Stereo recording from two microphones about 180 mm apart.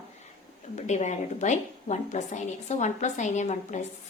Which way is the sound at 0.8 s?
40° left (ahead or behind).